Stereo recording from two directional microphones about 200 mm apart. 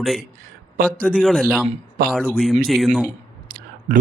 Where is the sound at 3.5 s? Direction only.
50° right (ahead or behind).